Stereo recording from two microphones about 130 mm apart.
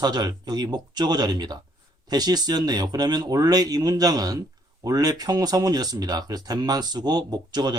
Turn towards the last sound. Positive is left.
turn(degrees=-30)  # may be behind; listen again after turning